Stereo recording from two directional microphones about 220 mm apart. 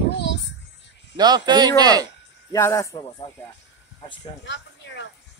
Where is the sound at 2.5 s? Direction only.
15° left (ahead or behind).